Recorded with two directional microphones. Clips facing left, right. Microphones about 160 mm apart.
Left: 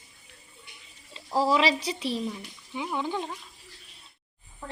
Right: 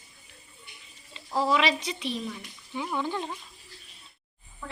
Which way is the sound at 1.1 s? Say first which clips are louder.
Left 2 dB; 35° left (ahead or behind).